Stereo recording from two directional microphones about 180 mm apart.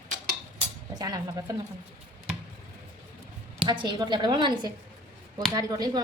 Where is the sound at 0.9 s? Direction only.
20° right (ahead or behind).